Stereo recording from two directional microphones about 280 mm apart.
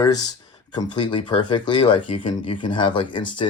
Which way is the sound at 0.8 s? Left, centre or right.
Centre.